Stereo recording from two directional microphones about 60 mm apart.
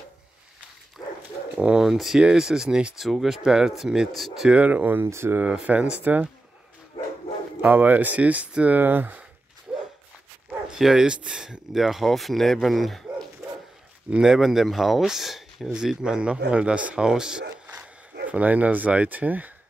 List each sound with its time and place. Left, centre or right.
1.8 s a man's voice: centre
4.5 s speech: right
5.0 s speech: right
5.4 s speech: right
7.6 s speech: right
9.7 s dog: right
10.7 s speech: centre
14.1 s a man's voice: centre
18.3 s speech: right